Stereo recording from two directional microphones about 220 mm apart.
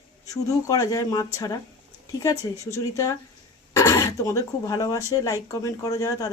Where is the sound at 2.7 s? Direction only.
15° left (ahead or behind).